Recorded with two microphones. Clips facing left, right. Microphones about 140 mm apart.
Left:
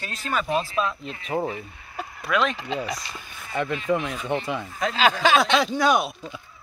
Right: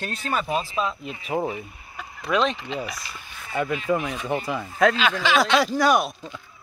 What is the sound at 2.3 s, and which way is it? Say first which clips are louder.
Speech: right 1 dB; 30° right (ahead or behind).